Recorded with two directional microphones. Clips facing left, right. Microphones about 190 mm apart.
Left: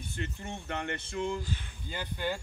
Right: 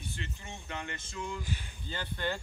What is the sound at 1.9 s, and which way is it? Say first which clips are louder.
Speech: left 1 dB; 10° left (ahead or behind).